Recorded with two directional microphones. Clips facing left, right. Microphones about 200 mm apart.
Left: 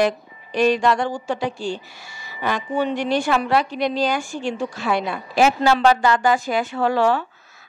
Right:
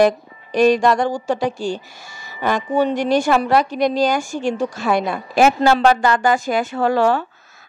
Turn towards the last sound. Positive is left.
turn(degrees=-45)  # may be behind; listen again after turning